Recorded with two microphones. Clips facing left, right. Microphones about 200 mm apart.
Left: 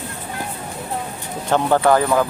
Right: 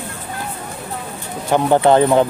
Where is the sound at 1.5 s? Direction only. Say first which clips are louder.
Right 3 dB; 20° right (ahead or behind).